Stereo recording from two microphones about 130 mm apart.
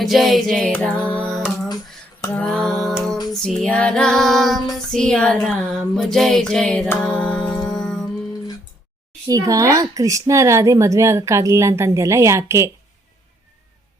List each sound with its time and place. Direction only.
0.0 s female singing: centre (ahead or behind)
0.7 s music: 10° left (ahead or behind)
3.4 s female singing: 5° left (ahead or behind)
7.0 s music: 10° left (ahead or behind)
9.2 s speech: 25° right (ahead or behind)